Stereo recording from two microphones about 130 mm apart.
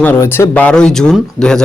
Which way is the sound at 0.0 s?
15° left (ahead or behind).